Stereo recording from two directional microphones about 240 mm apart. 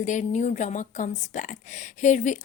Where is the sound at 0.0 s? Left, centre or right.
Left.